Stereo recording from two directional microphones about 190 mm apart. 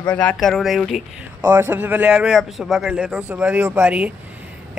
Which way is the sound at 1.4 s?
10° right (ahead or behind).